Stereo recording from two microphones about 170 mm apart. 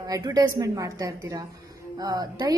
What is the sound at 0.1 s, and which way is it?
A woman's voice, 20° right (ahead or behind).